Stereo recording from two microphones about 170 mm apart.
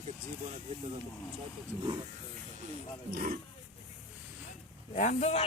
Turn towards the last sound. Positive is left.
turn(degrees=35)  # may be behind; listen again after turning